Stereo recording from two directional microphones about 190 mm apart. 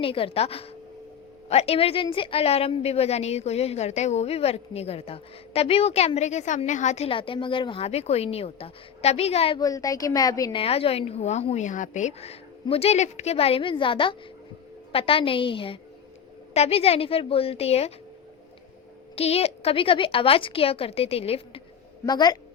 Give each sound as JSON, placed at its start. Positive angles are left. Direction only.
{"t": 0.0, "sound": "a woman's voice", "side_deg": 30}
{"t": 9.6, "sound": "a woman's voice", "side_deg": 20}
{"t": 19.1, "sound": "speech", "side_deg": 30}
{"t": 22.0, "sound": "speech", "side_deg": 20}